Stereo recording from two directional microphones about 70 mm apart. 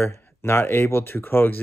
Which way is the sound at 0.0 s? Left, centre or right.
Left.